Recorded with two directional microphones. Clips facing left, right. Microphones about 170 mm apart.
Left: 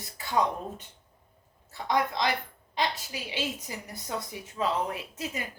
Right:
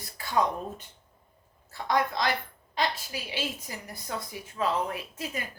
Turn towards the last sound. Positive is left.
turn(degrees=20)  # may be behind; listen again after turning